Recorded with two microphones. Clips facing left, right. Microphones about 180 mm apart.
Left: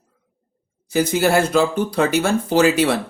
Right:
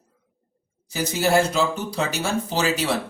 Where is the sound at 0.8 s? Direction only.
55° left (ahead or behind).